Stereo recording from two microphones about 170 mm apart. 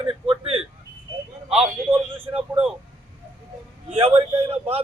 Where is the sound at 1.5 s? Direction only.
10° right (ahead or behind).